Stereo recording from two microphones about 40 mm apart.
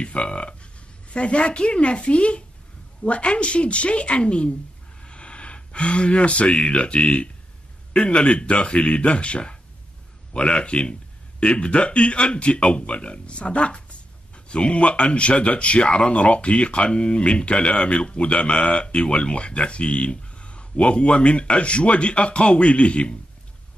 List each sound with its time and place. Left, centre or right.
0.0 s speech: left